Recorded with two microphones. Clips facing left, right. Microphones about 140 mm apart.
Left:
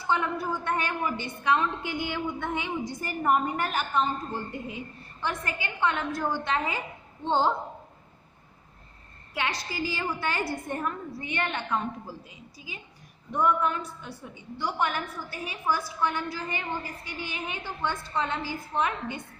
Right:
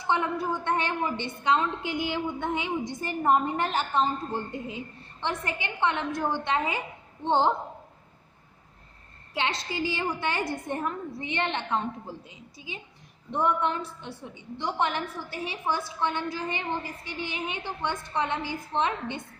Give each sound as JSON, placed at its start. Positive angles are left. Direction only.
{"t": 0.0, "sound": "a woman's voice", "side_deg": -20}
{"t": 9.3, "sound": "a woman's voice", "side_deg": -25}